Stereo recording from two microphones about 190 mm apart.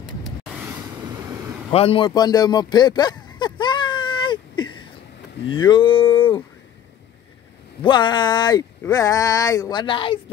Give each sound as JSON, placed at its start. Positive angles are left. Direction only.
{"t": 1.7, "sound": "a sound", "side_deg": 30}
{"t": 5.5, "sound": "speech", "side_deg": 25}
{"t": 7.8, "sound": "speech", "side_deg": 25}